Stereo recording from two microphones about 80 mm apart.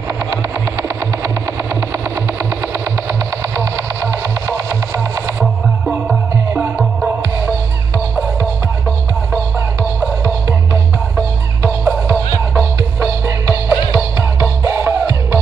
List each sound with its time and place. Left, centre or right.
2.6 s vehicle: right
11.8 s music: right